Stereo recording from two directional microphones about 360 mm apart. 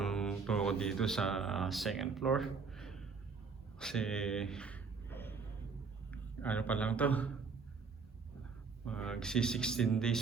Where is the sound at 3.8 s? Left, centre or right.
Centre.